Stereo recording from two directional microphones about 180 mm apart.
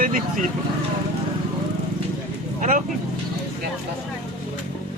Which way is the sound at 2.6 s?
45° right (ahead or behind).